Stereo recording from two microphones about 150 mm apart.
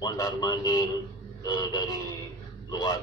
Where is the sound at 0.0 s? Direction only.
25° left (ahead or behind).